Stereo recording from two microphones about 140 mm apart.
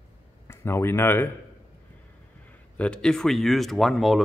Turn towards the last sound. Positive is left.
turn(degrees=0)  # may be behind; listen again after turning